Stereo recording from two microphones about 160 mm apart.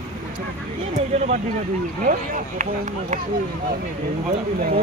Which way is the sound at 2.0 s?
55° right (ahead or behind).